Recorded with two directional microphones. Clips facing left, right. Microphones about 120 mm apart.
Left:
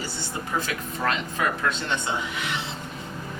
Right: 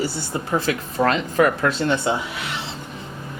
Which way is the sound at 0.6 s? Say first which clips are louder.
Right 8 dB; 35° right (ahead or behind).